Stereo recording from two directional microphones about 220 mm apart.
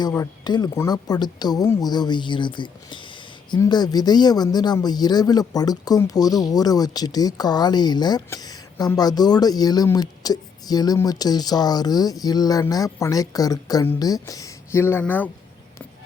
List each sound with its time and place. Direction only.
0.0 s speech: 15° left (ahead or behind)